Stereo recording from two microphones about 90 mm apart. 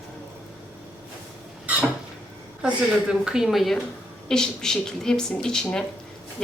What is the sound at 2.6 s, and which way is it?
Dishes, 10° right (ahead or behind).